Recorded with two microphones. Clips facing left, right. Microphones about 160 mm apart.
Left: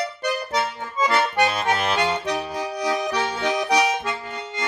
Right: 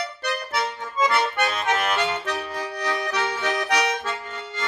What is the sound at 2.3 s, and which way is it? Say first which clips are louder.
Accordion: left 3 dB; 15° left (ahead or behind).